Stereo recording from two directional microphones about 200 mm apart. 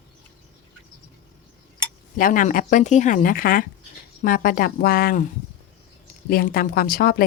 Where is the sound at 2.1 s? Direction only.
40° left (ahead or behind).